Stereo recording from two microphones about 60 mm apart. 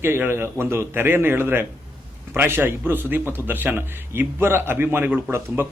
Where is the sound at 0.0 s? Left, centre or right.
Right.